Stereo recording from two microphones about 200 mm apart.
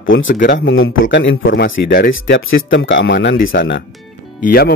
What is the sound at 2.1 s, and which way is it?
Speech, 80° left.